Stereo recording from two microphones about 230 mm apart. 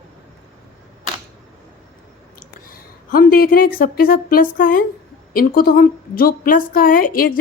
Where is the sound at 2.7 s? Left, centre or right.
Left.